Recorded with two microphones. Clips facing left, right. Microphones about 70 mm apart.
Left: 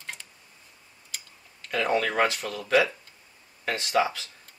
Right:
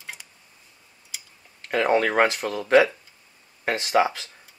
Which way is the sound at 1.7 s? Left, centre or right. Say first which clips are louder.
Right 5 dB; right.